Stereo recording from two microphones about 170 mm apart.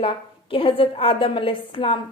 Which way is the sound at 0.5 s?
35° left (ahead or behind).